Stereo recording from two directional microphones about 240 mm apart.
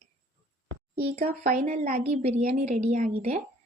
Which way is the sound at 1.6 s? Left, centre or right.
Right.